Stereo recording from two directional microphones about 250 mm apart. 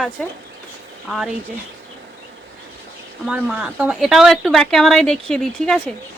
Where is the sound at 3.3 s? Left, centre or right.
Centre.